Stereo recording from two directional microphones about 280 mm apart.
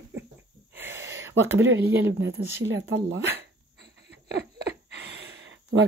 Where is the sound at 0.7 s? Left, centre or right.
Centre.